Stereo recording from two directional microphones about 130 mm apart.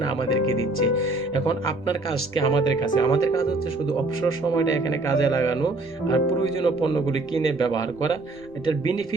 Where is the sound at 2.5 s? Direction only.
35° left (ahead or behind).